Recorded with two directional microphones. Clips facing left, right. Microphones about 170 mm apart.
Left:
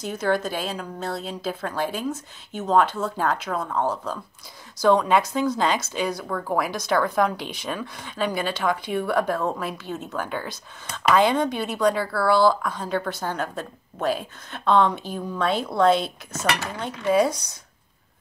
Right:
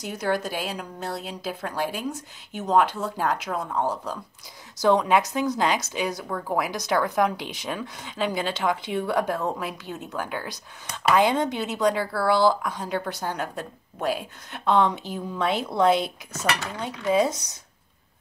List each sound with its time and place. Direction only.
0.0 s speech: 15° right (ahead or behind)